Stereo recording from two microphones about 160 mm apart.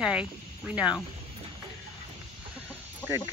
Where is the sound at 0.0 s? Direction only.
5° right (ahead or behind).